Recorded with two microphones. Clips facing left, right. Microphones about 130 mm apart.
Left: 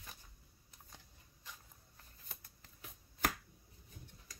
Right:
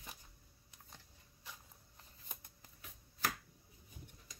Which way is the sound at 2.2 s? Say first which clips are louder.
Right 2 dB; 20° right (ahead or behind).